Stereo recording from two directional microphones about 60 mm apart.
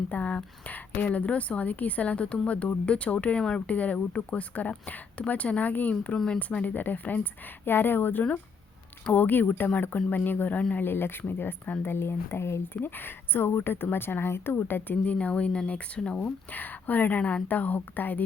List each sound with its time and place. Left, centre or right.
0.1 s a woman's voice: left
6.1 s a woman's voice: centre
6.5 s a woman's voice: left
10.8 s speech: left
15.0 s a woman's voice: left